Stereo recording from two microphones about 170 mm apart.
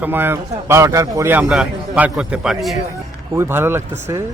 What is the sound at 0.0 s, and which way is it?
A man's voice, 10° right (ahead or behind).